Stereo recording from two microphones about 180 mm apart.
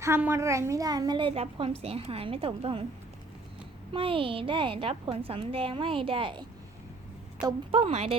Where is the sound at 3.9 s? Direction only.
30° right (ahead or behind).